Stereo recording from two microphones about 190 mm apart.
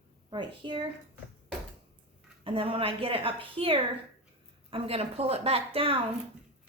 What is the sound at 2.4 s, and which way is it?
A woman's voice, 30° right (ahead or behind).